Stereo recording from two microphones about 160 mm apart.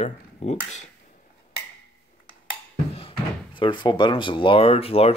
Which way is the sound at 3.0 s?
35° left (ahead or behind).